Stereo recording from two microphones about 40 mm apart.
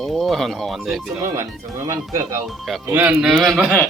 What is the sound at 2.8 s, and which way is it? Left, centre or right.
Speech, right.